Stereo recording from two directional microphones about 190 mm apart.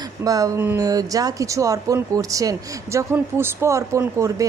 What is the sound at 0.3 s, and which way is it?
A woman's voice, 20° right (ahead or behind).